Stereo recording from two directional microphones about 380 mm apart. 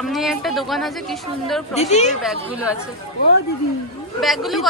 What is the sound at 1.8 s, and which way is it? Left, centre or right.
Speech, centre.